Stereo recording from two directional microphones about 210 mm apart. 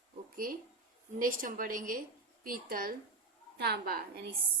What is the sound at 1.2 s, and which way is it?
A woman's voice, 40° right (ahead or behind).